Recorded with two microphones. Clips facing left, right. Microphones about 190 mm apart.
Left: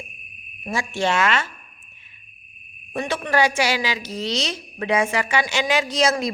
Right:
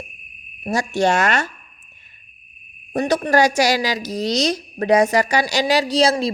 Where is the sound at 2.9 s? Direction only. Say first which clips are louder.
Right 5 dB; 40° right (ahead or behind).